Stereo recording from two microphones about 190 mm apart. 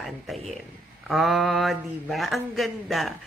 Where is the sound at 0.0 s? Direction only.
Centre (ahead or behind).